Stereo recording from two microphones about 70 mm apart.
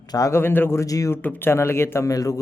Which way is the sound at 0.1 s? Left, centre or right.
Left.